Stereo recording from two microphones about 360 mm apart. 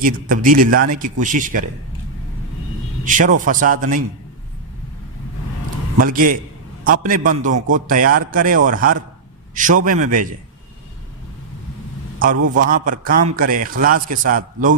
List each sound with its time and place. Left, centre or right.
0.0 s a man's voice: right
3.0 s a man's voice: right
6.0 s a man's voice: right
12.7 s a man's voice: right